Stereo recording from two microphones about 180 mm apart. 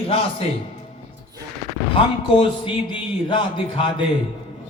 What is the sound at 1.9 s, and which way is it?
A man's voice, 30° left (ahead or behind).